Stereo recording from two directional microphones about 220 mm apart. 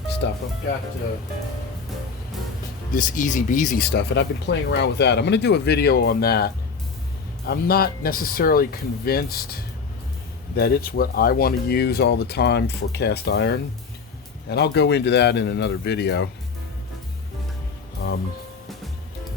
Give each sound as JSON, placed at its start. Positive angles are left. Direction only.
{"t": 0.2, "sound": "speech", "side_deg": 50}
{"t": 2.9, "sound": "speech", "side_deg": 35}
{"t": 10.5, "sound": "speech", "side_deg": 45}
{"t": 18.0, "sound": "music", "side_deg": 45}